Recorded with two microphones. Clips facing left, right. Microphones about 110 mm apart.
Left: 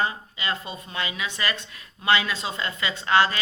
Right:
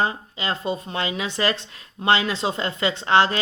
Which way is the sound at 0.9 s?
65° right (ahead or behind).